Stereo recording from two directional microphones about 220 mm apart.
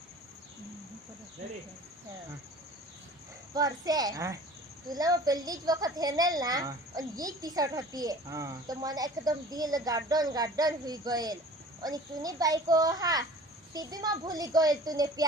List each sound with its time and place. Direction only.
3.5 s speech: 15° right (ahead or behind)